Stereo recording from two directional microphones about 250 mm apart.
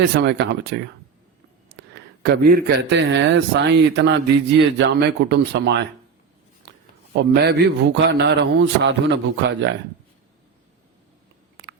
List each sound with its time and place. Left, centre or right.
0.0 s speech: right
2.0 s a man's voice: right
7.1 s a man's voice: right